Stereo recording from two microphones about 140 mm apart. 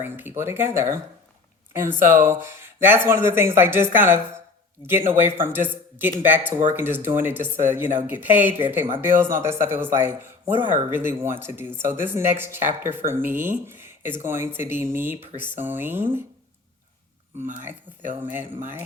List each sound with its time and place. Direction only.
0.0 s speech: 15° right (ahead or behind)